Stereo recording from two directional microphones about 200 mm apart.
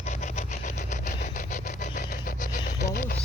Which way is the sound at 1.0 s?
40° left (ahead or behind).